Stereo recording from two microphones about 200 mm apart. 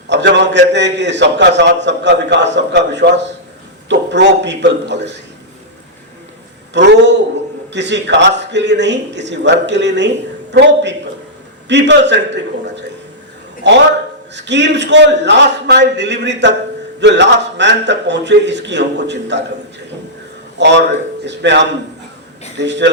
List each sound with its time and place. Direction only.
0.1 s a man's voice: 60° right (ahead or behind)
6.7 s a man's voice: 60° right (ahead or behind)
14.3 s a man's voice: 60° right (ahead or behind)
20.6 s a man's voice: 60° right (ahead or behind)